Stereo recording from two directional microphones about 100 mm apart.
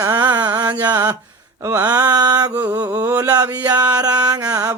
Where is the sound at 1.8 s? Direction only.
40° right (ahead or behind).